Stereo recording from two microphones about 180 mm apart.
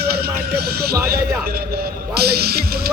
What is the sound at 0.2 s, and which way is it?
Music, 60° right (ahead or behind).